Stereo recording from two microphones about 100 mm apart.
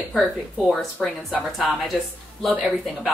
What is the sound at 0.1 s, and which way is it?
Speech, centre (ahead or behind).